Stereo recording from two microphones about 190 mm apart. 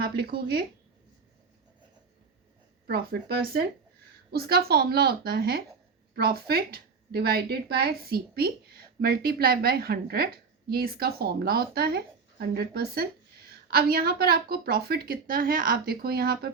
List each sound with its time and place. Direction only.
0.0 s speech: 55° right (ahead or behind)
2.8 s a woman's voice: 55° right (ahead or behind)